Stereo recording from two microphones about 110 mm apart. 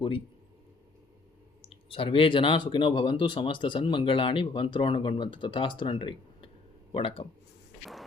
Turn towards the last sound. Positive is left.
turn(degrees=55)  # may be behind; listen again after turning